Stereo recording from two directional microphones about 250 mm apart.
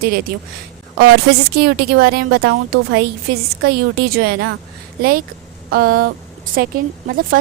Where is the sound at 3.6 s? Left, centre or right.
Right.